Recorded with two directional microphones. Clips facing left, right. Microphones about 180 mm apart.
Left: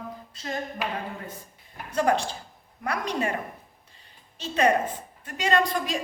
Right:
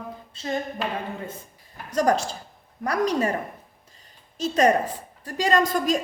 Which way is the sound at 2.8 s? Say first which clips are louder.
Right 5 dB; 40° right (ahead or behind).